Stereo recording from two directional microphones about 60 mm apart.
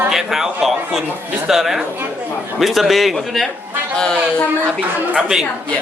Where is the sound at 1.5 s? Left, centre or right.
Centre.